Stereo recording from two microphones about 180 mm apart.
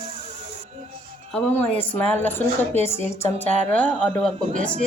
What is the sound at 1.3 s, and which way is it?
A woman's voice, 10° left (ahead or behind).